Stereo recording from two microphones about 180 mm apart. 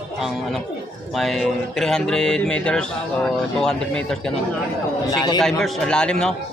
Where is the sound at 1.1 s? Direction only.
Centre (ahead or behind).